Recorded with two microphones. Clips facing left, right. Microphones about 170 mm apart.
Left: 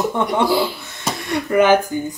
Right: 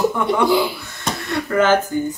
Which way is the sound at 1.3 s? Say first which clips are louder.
Left 2 dB; 15° left (ahead or behind).